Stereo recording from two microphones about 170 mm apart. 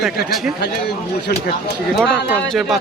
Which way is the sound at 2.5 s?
Centre (ahead or behind).